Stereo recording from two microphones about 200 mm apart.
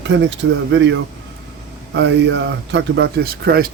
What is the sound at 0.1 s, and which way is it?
Speech, 65° right (ahead or behind).